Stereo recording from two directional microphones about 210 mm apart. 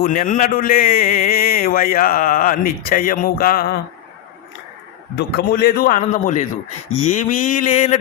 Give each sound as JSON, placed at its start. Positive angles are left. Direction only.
{"t": 0.0, "sound": "a man's voice", "side_deg": 40}
{"t": 5.1, "sound": "a man's voice", "side_deg": 45}
{"t": 6.9, "sound": "mantra", "side_deg": 35}